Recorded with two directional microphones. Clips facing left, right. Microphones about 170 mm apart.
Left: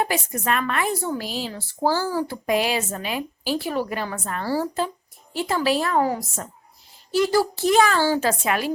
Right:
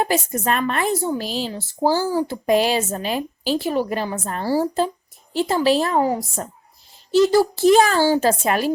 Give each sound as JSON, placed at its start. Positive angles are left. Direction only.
{"t": 0.0, "sound": "speech", "side_deg": -30}
{"t": 1.0, "sound": "a woman's voice", "side_deg": -25}
{"t": 2.5, "sound": "speech", "side_deg": -30}
{"t": 3.5, "sound": "a woman's voice", "side_deg": -20}